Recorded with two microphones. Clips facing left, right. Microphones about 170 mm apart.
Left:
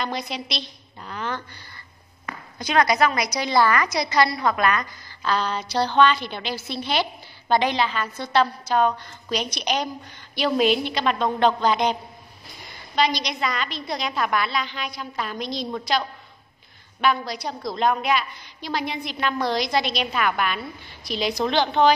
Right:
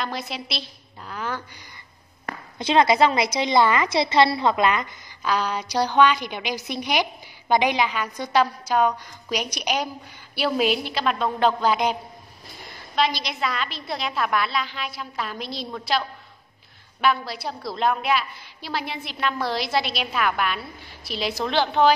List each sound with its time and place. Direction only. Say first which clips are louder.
0.0 s a woman's voice: left 1 dB; 5° right (ahead or behind)
2.6 s a woman's voice: right 2 dB; 25° right (ahead or behind)
5.2 s a woman's voice: even; 10° right (ahead or behind)
17.0 s a woman's voice: even; centre (ahead or behind)